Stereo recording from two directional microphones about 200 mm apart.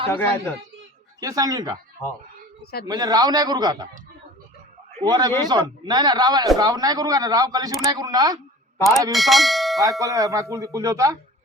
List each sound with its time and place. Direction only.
0.1 s a man's voice: 10° left (ahead or behind)
1.2 s speech: 20° right (ahead or behind)
2.8 s speech: 20° right (ahead or behind)
4.9 s a man's voice: 20° right (ahead or behind)
9.1 s speech: centre (ahead or behind)
10.0 s speech: 15° right (ahead or behind)